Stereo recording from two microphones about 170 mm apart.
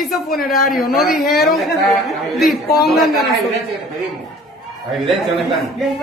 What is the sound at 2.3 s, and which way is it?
Speech, centre (ahead or behind).